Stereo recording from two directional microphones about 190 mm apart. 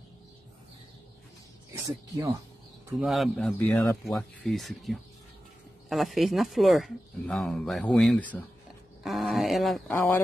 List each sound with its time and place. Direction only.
1.7 s speech: 15° right (ahead or behind)
3.0 s speech: centre (ahead or behind)
9.9 s speech: 10° left (ahead or behind)